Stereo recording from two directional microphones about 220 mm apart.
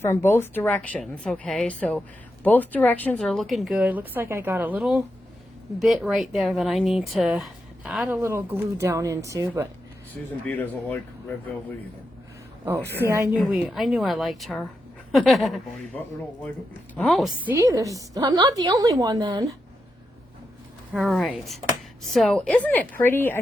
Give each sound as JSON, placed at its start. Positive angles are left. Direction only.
{"t": 0.0, "sound": "speech", "side_deg": 10}
{"t": 10.4, "sound": "a woman's voice", "side_deg": 5}
{"t": 12.6, "sound": "a woman's voice", "side_deg": -10}
{"t": 13.4, "sound": "speech", "side_deg": 0}
{"t": 16.9, "sound": "a woman's voice", "side_deg": 5}
{"t": 20.9, "sound": "a woman's voice", "side_deg": 0}